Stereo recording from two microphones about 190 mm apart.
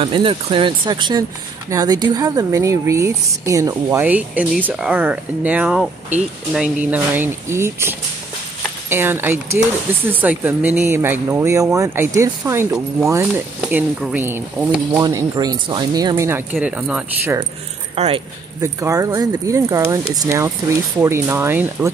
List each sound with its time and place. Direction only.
0.0 s a woman's voice: 30° right (ahead or behind); by 17.4 s 5° right (ahead or behind)
17.9 s speech: 35° right (ahead or behind)
18.6 s a woman's voice: 15° right (ahead or behind)